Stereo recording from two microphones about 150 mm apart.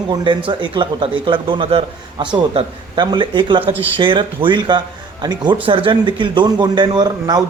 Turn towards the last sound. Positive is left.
turn(degrees=-25)  # may be behind; listen again after turning